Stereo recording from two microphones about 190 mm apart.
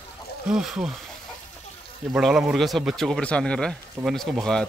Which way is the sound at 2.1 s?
Centre (ahead or behind).